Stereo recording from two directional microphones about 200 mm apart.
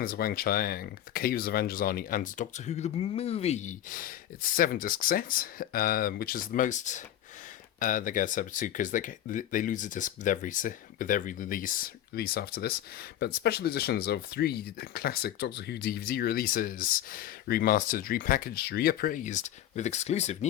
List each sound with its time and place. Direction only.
0.0 s speech: 50° left (ahead or behind)